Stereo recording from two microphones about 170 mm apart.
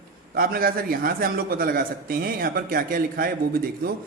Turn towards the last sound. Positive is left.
turn(degrees=-60)  # may be behind; listen again after turning